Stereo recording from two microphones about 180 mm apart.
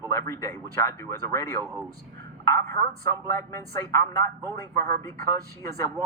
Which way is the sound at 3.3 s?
15° left (ahead or behind).